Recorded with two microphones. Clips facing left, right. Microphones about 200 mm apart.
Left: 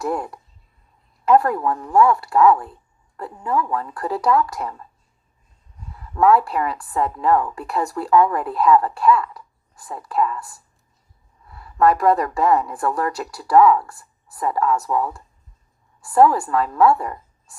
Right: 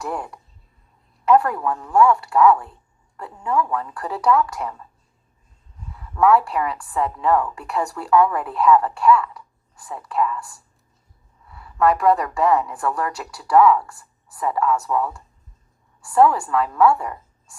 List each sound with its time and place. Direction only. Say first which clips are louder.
0.1 s a woman's voice: left 4 dB; 40° left (ahead or behind)
6.1 s a woman's voice: left 1 dB; 35° left (ahead or behind)
11.5 s a woman's voice: left 2 dB; 40° left (ahead or behind)
16.1 s a woman's voice: left 1 dB; 40° left (ahead or behind)